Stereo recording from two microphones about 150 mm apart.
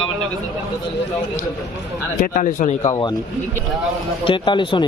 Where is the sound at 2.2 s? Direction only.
60° left (ahead or behind).